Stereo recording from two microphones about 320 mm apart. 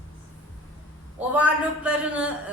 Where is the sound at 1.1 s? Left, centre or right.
Centre.